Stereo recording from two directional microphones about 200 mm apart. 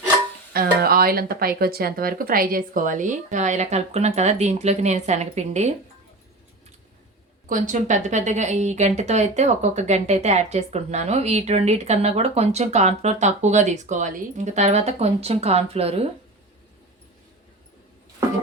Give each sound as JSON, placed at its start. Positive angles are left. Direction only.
{"t": 0.5, "sound": "speech", "side_deg": -50}
{"t": 7.4, "sound": "speech", "side_deg": -40}